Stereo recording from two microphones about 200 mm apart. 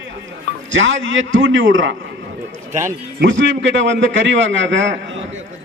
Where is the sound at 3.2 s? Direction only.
65° right (ahead or behind).